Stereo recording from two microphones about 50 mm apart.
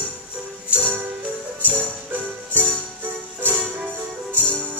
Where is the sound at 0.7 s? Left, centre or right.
Right.